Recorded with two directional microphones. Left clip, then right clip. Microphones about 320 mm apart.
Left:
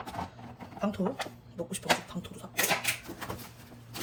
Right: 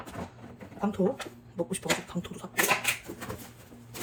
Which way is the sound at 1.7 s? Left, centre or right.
Centre.